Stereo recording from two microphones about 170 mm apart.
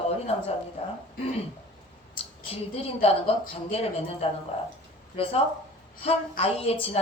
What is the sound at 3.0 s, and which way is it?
A woman's voice, 35° left (ahead or behind).